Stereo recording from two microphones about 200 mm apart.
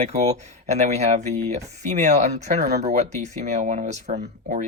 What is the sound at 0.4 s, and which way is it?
Speech, 35° right (ahead or behind).